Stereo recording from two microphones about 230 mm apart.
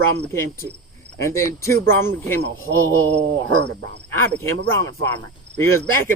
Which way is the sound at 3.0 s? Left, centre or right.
Right.